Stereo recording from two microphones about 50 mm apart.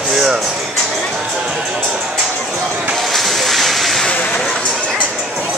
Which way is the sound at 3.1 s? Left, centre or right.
Centre.